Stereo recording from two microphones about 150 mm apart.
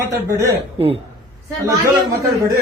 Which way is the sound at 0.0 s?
20° right (ahead or behind).